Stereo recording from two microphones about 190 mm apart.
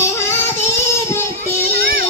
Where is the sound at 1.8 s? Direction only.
55° right (ahead or behind).